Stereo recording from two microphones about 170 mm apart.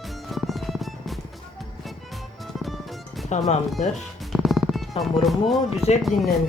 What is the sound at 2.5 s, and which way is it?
Music, centre (ahead or behind).